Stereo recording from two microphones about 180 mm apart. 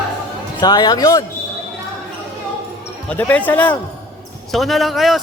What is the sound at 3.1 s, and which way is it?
A man's voice, 10° left (ahead or behind).